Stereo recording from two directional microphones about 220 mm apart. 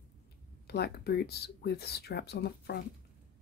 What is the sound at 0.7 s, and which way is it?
Speech, 45° left (ahead or behind).